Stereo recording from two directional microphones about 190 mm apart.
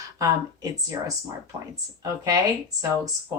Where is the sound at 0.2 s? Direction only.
15° right (ahead or behind).